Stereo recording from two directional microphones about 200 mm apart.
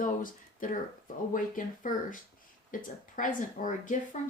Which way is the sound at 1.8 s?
40° left (ahead or behind).